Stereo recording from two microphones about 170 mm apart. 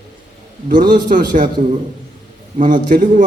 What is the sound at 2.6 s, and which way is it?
Speech, 55° right (ahead or behind).